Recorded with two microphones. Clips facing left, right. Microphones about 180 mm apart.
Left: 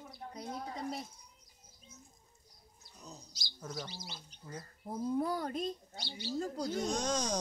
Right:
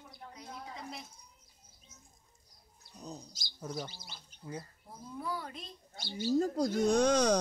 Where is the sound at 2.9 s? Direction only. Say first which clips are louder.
Right 7 dB; 35° right (ahead or behind).